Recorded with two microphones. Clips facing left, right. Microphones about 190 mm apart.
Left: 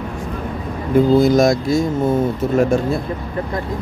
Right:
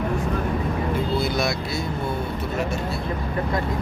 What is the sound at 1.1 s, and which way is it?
Speech, 45° left (ahead or behind).